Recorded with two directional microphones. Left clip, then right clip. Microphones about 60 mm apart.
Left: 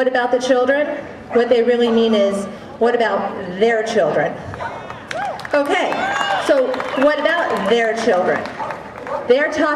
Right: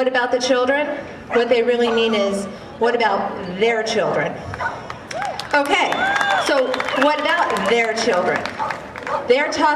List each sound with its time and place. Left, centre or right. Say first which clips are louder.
0.1 s a man's voice: left 2 dB; centre
5.5 s a man's voice: even; centre